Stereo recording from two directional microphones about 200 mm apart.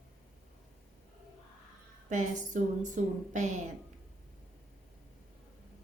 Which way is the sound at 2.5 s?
40° right (ahead or behind).